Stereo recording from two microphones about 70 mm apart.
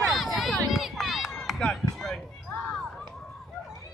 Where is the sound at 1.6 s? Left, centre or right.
Centre.